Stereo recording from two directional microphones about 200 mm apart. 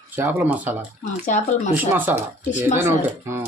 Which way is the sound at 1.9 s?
10° right (ahead or behind).